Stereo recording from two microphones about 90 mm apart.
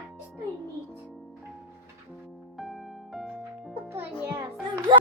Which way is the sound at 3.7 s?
25° right (ahead or behind).